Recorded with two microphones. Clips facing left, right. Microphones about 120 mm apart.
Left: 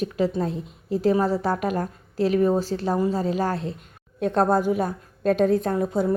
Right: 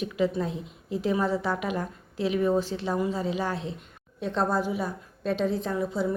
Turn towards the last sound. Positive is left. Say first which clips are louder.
# left 5 dB
turn(degrees=50)  # may be behind; listen again after turning